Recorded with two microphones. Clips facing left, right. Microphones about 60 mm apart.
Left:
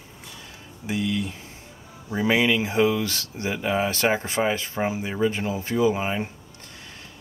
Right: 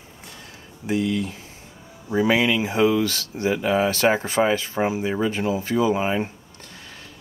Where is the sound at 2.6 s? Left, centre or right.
Centre.